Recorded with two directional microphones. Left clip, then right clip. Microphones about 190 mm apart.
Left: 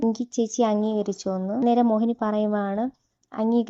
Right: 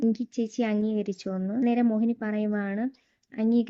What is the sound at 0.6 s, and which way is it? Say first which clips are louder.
Speech: left 6 dB; 5° left (ahead or behind).